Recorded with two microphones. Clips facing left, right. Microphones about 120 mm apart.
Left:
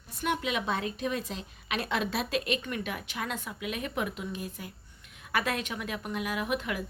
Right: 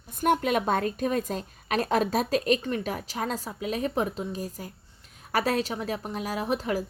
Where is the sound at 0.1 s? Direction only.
45° right (ahead or behind).